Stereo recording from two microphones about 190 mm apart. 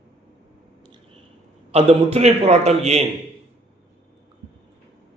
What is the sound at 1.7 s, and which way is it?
A man's voice, 30° right (ahead or behind).